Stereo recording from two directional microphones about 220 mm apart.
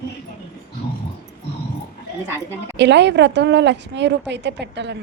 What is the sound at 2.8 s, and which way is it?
A woman's voice, 50° right (ahead or behind).